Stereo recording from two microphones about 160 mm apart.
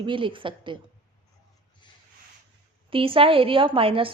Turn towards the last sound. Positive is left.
turn(degrees=-35)  # may be behind; listen again after turning